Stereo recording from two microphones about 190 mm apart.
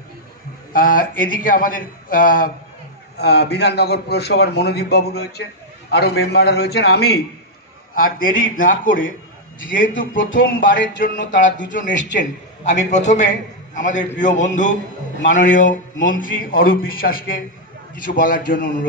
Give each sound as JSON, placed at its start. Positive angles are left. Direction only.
{"t": 0.7, "sound": "a man's voice", "side_deg": 45}
{"t": 3.2, "sound": "a man's voice", "side_deg": 60}
{"t": 7.9, "sound": "a man's voice", "side_deg": 45}
{"t": 9.6, "sound": "a man's voice", "side_deg": 85}
{"t": 10.4, "sound": "a man's voice", "side_deg": 45}
{"t": 11.9, "sound": "a man's voice", "side_deg": 70}
{"t": 12.2, "sound": "a man's voice", "side_deg": 40}